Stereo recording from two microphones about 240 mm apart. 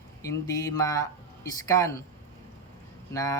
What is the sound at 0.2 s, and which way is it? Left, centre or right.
A man's voice, centre.